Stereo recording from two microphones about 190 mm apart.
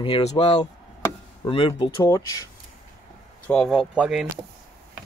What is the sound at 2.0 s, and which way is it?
Speech, 15° left (ahead or behind).